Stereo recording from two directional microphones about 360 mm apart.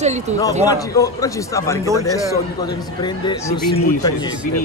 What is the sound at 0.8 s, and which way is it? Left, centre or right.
Speech, centre.